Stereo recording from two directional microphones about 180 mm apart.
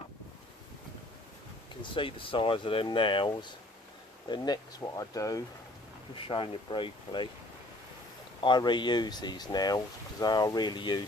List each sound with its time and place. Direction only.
1.8 s speech: 30° left (ahead or behind)
8.4 s speech: 25° left (ahead or behind)